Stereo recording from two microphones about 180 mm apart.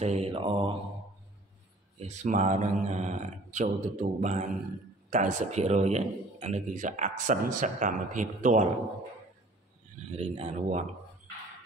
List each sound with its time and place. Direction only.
0.0 s speech: 35° right (ahead or behind)
2.0 s a man's voice: 40° right (ahead or behind)
10.1 s speech: 35° right (ahead or behind)